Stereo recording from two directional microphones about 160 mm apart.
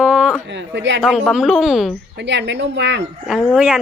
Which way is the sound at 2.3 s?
90° right.